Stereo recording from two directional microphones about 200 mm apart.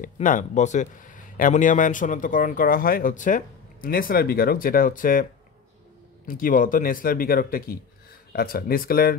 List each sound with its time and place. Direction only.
0.0 s speech: 40° left (ahead or behind)
6.2 s speech: 45° left (ahead or behind)